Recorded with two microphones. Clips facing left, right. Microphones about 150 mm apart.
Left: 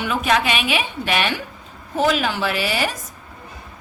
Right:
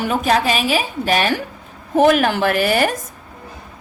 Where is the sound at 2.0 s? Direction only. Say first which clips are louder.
Right 6 dB; 55° right (ahead or behind).